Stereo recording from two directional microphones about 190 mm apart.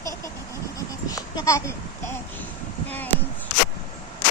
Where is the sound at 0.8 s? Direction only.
20° left (ahead or behind).